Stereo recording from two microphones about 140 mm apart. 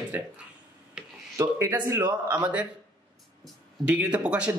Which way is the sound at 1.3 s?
20° right (ahead or behind).